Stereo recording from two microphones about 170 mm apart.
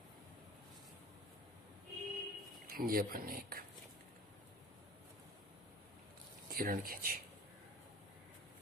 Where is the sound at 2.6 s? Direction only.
60° right (ahead or behind).